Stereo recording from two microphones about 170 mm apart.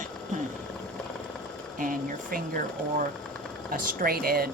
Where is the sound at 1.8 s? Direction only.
50° right (ahead or behind).